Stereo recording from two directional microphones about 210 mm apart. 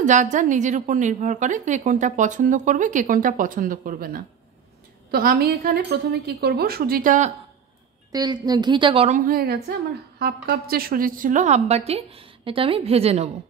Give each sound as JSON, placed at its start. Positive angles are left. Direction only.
{"t": 0.0, "sound": "a woman's voice", "side_deg": -35}
{"t": 8.1, "sound": "a woman's voice", "side_deg": -20}
{"t": 9.2, "sound": "a woman's voice", "side_deg": -45}